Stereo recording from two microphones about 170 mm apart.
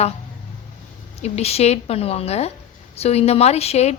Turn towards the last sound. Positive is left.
turn(degrees=40)  # may be behind; listen again after turning